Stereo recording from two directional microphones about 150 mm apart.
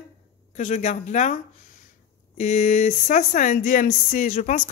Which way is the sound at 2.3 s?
55° left (ahead or behind).